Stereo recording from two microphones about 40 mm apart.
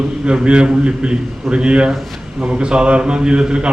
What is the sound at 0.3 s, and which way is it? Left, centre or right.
A man's voice, right.